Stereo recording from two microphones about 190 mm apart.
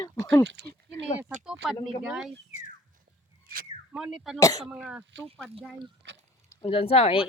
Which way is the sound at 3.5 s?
50° right (ahead or behind).